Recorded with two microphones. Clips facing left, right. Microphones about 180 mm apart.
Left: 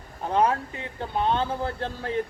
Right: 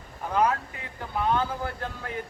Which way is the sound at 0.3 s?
30° left (ahead or behind).